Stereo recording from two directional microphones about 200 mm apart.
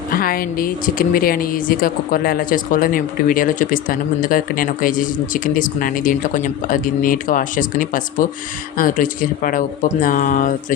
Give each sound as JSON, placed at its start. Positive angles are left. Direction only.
{"t": 0.1, "sound": "speech", "side_deg": 45}